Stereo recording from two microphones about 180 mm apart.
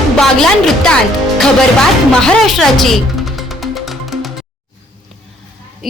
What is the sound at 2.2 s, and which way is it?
Music, centre (ahead or behind).